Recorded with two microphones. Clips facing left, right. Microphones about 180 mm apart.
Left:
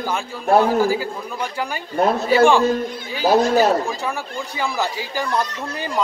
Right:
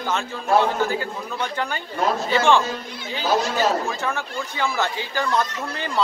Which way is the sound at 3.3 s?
50° left (ahead or behind).